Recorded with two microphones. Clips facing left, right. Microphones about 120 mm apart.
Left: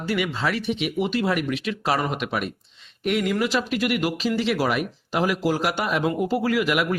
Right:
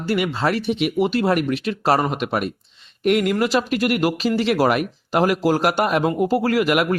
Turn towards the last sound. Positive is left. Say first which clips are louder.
# right 4 dB
turn(degrees=-55)  # may be behind; listen again after turning